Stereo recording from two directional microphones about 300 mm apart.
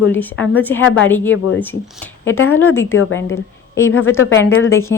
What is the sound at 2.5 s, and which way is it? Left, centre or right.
Speech, centre.